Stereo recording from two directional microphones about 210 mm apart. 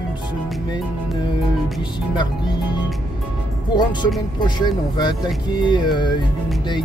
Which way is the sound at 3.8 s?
20° left (ahead or behind).